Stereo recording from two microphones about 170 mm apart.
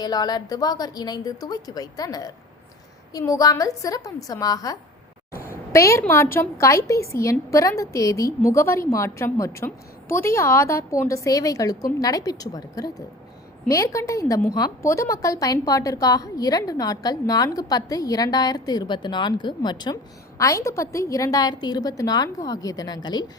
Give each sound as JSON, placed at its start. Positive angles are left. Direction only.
{"t": 0.0, "sound": "a woman's voice", "side_deg": 25}